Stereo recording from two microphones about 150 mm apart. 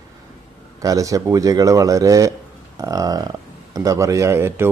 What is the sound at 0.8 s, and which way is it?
A man's voice, 20° right (ahead or behind).